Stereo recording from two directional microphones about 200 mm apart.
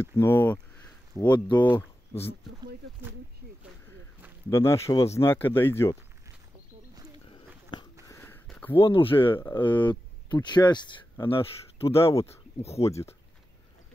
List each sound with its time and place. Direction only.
0.0 s a sound: 10° left (ahead or behind)
1.6 s speech: 10° left (ahead or behind)
4.5 s speech: 15° left (ahead or behind)
8.1 s a sound: 10° left (ahead or behind)
8.7 s speech: 25° left (ahead or behind)
12.0 s speech: 15° left (ahead or behind)